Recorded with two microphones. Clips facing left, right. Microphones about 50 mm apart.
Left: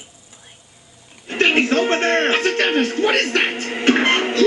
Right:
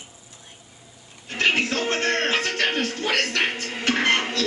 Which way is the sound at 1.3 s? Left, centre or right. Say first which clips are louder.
Left 6 dB; left.